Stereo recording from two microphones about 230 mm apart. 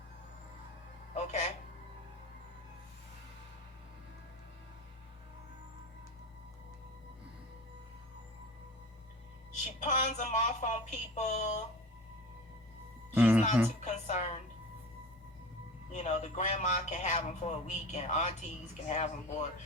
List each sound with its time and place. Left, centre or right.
1.1 s a sound: left
9.8 s a man's voice: left
13.1 s music: centre
13.8 s speech: left
15.9 s a man's voice: left